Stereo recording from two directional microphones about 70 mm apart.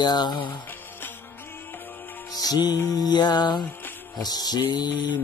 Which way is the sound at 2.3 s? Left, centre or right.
Left.